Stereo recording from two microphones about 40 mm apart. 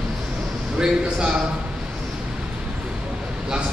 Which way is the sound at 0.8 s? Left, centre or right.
Right.